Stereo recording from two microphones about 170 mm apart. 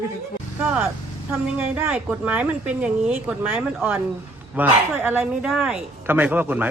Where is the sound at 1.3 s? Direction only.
5° right (ahead or behind).